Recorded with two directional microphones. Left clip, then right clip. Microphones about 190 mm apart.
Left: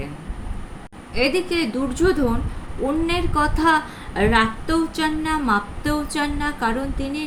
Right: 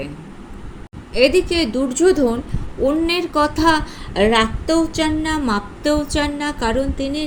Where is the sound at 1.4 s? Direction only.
15° right (ahead or behind).